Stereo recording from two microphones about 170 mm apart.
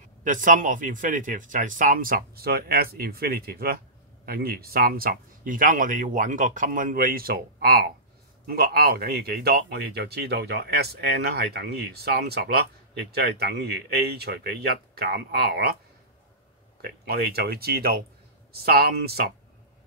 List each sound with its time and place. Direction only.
0.2 s speech: 50° right (ahead or behind); by 15.6 s 65° right (ahead or behind)
16.8 s speech: 65° right (ahead or behind)